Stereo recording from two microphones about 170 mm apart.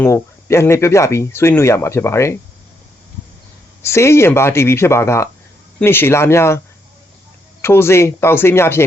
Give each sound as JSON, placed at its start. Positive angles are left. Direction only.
{"t": 0.0, "sound": "speech", "side_deg": 15}
{"t": 3.8, "sound": "speech", "side_deg": 15}
{"t": 7.6, "sound": "speech", "side_deg": 15}